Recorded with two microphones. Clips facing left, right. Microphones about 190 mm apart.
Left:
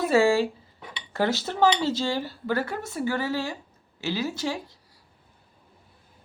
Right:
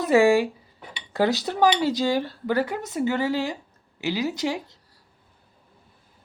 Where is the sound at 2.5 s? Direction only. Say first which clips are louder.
Right 3 dB; 15° right (ahead or behind).